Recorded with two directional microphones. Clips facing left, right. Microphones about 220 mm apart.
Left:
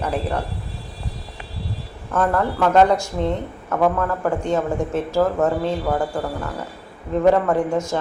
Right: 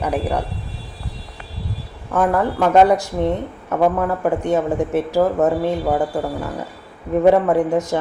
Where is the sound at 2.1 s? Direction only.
15° right (ahead or behind).